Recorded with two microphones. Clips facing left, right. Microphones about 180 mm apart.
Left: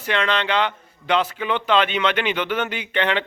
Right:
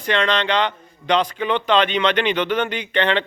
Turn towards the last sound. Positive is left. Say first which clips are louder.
# right 2 dB
turn(degrees=10)  # may be behind; listen again after turning